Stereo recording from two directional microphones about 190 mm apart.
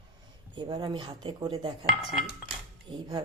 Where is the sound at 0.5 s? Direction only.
25° right (ahead or behind).